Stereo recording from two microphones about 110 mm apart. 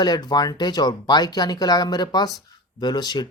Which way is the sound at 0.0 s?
40° left (ahead or behind).